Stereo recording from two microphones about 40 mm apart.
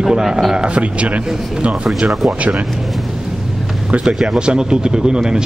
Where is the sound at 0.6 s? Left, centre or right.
Right.